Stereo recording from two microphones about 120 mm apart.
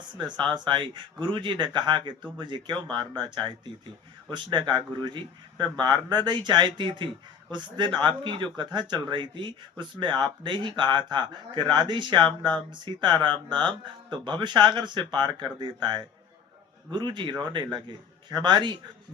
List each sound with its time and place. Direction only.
0.2 s speech: 40° right (ahead or behind)